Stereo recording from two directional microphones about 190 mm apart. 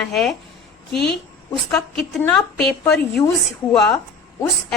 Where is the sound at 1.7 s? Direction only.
5° left (ahead or behind).